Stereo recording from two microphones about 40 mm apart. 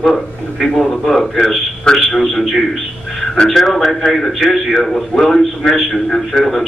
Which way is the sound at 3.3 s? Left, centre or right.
Centre.